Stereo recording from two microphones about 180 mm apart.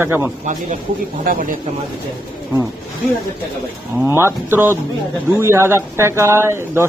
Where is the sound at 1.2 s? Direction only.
50° right (ahead or behind).